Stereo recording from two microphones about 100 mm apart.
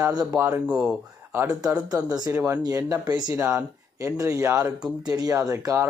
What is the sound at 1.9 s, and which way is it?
Speech, 35° right (ahead or behind).